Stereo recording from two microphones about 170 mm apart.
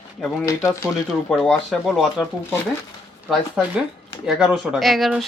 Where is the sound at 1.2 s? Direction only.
Centre (ahead or behind).